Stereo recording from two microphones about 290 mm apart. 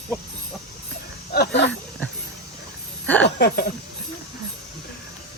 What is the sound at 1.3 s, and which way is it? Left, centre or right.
Speech, left.